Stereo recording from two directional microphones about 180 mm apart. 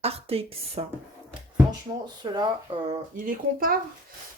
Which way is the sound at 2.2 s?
25° right (ahead or behind).